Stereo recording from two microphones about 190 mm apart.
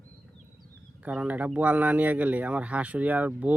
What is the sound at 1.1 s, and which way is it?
Speech, 5° right (ahead or behind).